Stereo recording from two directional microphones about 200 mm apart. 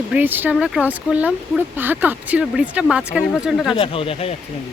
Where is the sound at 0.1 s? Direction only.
10° right (ahead or behind).